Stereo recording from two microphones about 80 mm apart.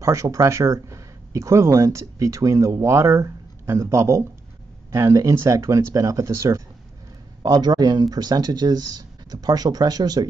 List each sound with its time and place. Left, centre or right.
0.0 s speech: right
7.4 s speech: right